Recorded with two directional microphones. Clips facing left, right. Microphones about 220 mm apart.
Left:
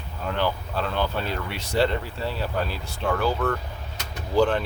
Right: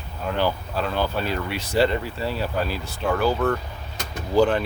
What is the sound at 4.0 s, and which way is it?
Vehicle, 50° right (ahead or behind).